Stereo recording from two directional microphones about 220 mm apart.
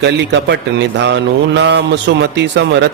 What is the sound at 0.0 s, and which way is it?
A man's voice, 55° right (ahead or behind).